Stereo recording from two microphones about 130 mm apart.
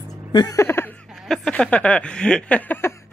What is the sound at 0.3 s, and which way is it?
Music, 30° left (ahead or behind).